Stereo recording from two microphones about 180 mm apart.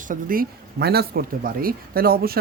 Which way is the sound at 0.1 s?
50° right (ahead or behind).